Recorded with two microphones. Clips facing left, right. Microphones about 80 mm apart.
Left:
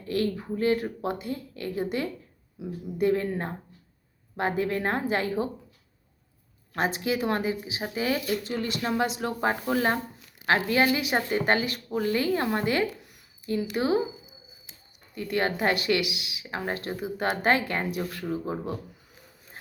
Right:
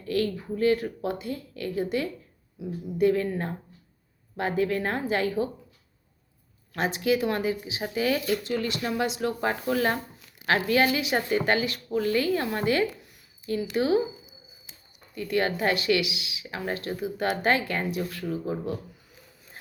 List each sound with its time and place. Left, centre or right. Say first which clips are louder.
0.0 s speech: right 1 dB; left
4.4 s speech: right 1 dB; left
6.7 s speech: right 2 dB; left
9.2 s speech: even; left
15.1 s speech: right 1 dB; left